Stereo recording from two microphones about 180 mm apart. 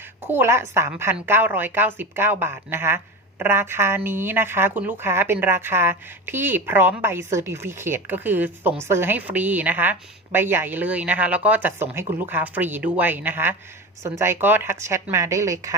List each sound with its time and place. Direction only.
0.3 s a woman's voice: 15° right (ahead or behind)